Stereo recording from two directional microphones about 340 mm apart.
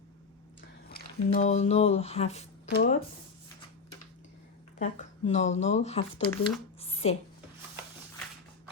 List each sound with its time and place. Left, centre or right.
0.9 s speech: left
4.8 s speech: centre
6.7 s a sound: centre